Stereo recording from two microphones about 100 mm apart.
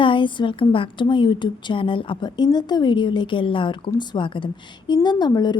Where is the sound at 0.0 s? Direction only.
55° left (ahead or behind).